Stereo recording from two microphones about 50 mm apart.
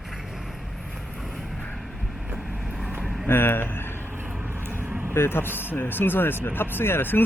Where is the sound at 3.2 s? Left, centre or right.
Left.